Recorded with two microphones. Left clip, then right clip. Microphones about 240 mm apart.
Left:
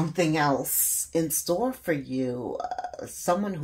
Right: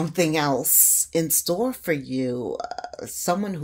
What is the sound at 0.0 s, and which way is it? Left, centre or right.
Speech, right.